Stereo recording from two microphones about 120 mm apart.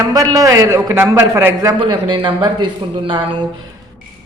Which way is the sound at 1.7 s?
45° right (ahead or behind).